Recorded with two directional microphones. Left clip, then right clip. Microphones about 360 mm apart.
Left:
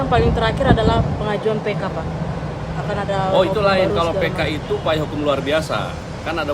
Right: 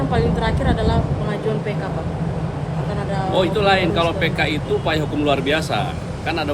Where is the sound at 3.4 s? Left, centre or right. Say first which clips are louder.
Right 1 dB; centre.